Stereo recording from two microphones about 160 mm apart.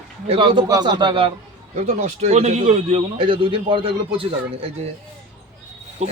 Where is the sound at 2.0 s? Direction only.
45° right (ahead or behind).